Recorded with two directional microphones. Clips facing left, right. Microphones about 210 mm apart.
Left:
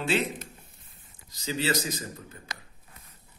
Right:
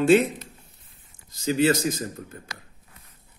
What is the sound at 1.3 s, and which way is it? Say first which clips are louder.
Speech: right 8 dB; 50° right (ahead or behind).